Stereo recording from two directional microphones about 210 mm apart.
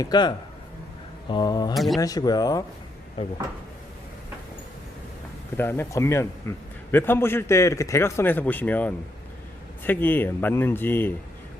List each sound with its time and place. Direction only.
0.0 s speech: 20° left (ahead or behind)
1.7 s speech: centre (ahead or behind)
2.0 s a man's voice: 15° left (ahead or behind)
5.5 s a man's voice: 10° left (ahead or behind)